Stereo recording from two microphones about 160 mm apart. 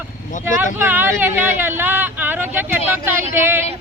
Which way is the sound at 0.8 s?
10° right (ahead or behind).